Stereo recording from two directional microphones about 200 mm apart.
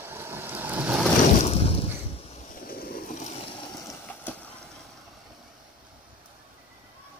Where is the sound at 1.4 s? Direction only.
30° left (ahead or behind).